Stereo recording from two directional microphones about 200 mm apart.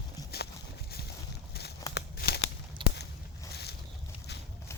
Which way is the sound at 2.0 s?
55° left (ahead or behind).